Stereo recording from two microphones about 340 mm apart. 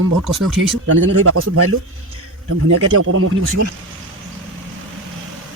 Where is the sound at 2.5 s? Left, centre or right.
Right.